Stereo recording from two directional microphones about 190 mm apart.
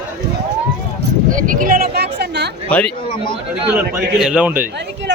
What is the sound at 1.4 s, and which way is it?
Speech, 45° right (ahead or behind).